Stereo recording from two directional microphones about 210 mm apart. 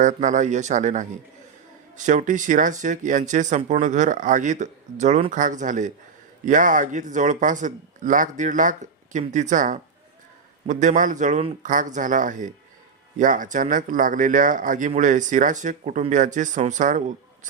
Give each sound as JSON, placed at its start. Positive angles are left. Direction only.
{"t": 0.0, "sound": "speech", "side_deg": -35}